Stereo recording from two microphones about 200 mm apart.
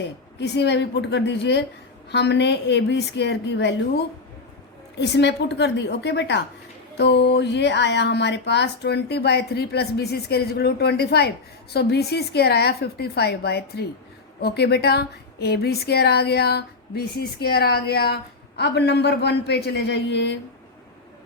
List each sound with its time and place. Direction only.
0.3 s a woman's voice: 60° left (ahead or behind)